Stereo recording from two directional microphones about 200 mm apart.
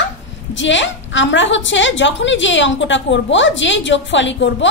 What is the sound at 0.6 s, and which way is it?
A woman's voice, 65° left (ahead or behind).